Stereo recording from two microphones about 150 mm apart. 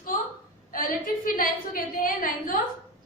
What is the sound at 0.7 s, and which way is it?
A woman's voice, 70° left (ahead or behind).